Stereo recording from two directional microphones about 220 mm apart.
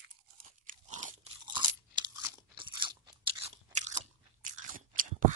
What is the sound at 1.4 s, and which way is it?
Crunch, 20° right (ahead or behind).